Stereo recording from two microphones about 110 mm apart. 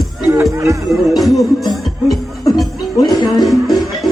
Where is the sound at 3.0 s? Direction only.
40° left (ahead or behind).